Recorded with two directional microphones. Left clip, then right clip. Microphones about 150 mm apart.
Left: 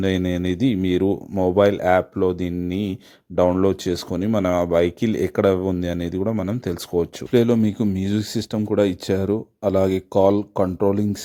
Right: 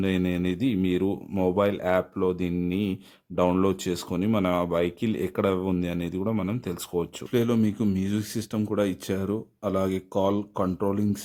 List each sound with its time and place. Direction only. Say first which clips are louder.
0.0 s speech: left 5 dB; 35° left (ahead or behind)